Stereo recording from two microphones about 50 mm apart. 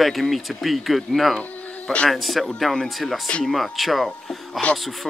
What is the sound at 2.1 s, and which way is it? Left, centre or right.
Speech, centre.